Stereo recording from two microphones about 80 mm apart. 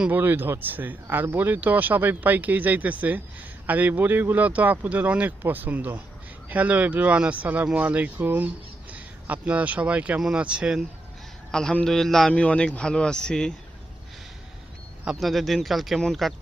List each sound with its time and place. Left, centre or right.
0.1 s speech: right
11.5 s speech: centre
15.1 s speech: centre